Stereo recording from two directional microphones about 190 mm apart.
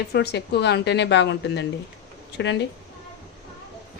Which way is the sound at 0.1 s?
60° left (ahead or behind).